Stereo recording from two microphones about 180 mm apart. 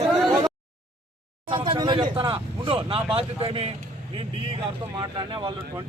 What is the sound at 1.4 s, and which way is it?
Speech, 30° right (ahead or behind).